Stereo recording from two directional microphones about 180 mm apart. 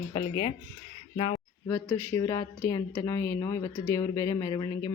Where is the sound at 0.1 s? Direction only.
30° left (ahead or behind).